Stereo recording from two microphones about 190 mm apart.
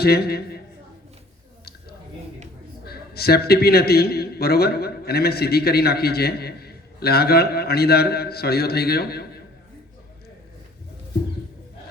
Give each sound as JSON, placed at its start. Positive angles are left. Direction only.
{"t": 0.0, "sound": "a man's voice", "side_deg": 55}
{"t": 2.8, "sound": "a man's voice", "side_deg": 55}